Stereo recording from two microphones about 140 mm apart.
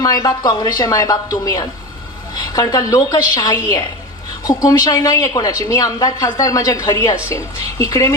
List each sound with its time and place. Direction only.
0.0 s a woman's voice: 25° left (ahead or behind)